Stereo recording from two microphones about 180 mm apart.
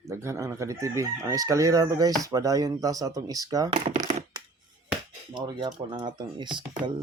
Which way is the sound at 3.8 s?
40° right (ahead or behind).